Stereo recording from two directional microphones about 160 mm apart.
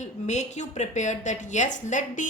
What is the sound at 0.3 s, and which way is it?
A woman's voice, 45° left (ahead or behind).